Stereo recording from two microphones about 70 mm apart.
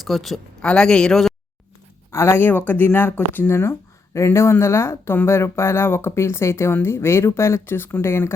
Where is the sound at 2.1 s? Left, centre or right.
Left.